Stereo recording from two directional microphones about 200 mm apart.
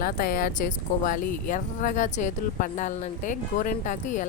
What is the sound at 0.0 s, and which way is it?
Speech, 50° left (ahead or behind).